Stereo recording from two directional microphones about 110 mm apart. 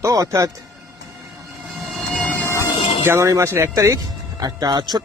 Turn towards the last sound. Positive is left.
turn(degrees=-40)  # may be behind; listen again after turning